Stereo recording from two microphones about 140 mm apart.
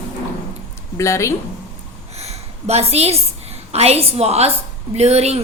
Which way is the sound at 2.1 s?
50° right (ahead or behind).